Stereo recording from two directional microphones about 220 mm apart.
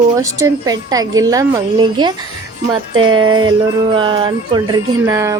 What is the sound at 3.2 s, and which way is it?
Music, 20° right (ahead or behind).